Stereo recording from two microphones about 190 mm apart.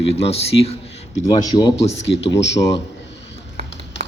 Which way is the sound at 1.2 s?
20° left (ahead or behind).